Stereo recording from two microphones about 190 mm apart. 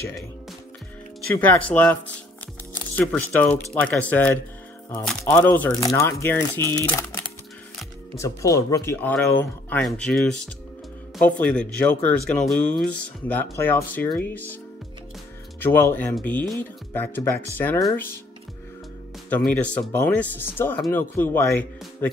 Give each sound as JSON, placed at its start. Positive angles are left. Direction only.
{"t": 1.3, "sound": "speech", "side_deg": 10}
{"t": 3.0, "sound": "speech", "side_deg": 10}
{"t": 8.2, "sound": "speech", "side_deg": 15}
{"t": 15.6, "sound": "speech", "side_deg": 10}
{"t": 19.2, "sound": "speech", "side_deg": 10}